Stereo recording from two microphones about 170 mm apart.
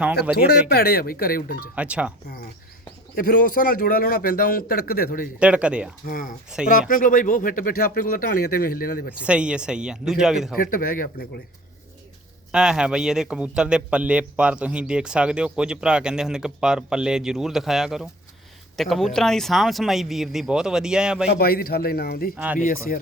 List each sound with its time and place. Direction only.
0.3 s speech: 70° left (ahead or behind)
1.7 s speech: 10° right (ahead or behind)
3.2 s speech: 55° left (ahead or behind)
5.4 s speech: 5° right (ahead or behind)
6.1 s speech: 55° left (ahead or behind)
9.1 s a man's voice: 5° right (ahead or behind)
10.6 s speech: 55° left (ahead or behind)
12.5 s a man's voice: 5° right (ahead or behind)
21.2 s speech: 60° left (ahead or behind)